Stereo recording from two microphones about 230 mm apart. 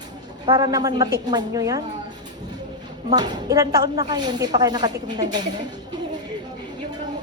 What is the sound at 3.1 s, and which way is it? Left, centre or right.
Speech, centre.